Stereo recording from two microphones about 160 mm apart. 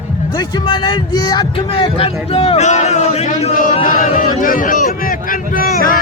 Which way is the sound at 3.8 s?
55° left (ahead or behind).